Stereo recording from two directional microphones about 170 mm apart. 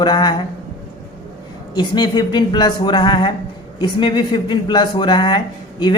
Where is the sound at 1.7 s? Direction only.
25° left (ahead or behind).